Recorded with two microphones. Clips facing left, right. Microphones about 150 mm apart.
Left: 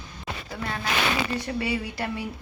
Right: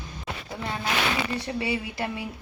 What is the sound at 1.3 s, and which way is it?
Speech, 30° right (ahead or behind).